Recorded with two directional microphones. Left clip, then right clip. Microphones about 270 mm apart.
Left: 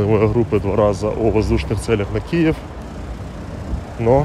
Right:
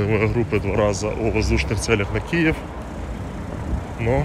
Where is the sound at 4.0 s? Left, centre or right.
Centre.